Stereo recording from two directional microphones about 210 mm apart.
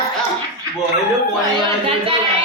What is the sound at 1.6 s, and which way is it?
Speech, 25° right (ahead or behind).